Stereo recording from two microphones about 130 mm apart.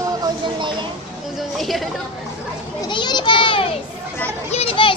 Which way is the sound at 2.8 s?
35° left (ahead or behind).